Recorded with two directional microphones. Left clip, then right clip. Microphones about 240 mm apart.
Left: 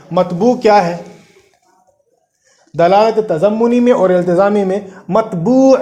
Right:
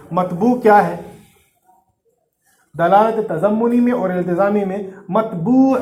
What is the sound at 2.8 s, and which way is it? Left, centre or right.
A man's voice, left.